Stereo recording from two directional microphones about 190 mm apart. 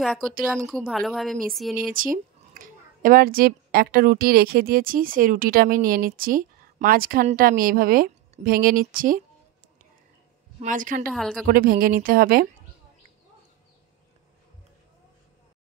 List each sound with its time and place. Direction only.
0.7 s speech: centre (ahead or behind)
2.0 s a woman's voice: 45° right (ahead or behind)
10.6 s a woman's voice: 45° right (ahead or behind)
11.1 s speech: centre (ahead or behind)
11.4 s a woman's voice: 50° right (ahead or behind)